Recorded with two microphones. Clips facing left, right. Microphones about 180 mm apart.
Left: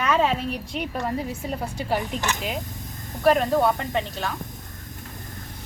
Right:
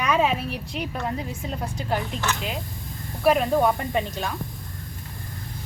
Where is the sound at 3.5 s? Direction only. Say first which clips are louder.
Even; 15° right (ahead or behind).